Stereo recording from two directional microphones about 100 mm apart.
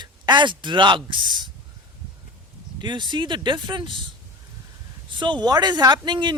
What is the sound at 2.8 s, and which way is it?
Speech, 50° right (ahead or behind).